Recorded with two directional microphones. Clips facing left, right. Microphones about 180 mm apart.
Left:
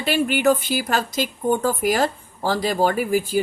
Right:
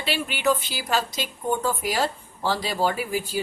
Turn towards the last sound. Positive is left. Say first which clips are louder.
# left 7 dB
turn(degrees=50)  # may be behind; listen again after turning